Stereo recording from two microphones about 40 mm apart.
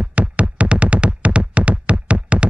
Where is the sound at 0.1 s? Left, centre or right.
Right.